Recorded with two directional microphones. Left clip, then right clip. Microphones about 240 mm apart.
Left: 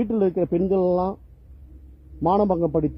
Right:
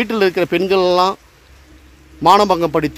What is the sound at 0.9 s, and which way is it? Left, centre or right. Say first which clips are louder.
Speech: right 9 dB; right.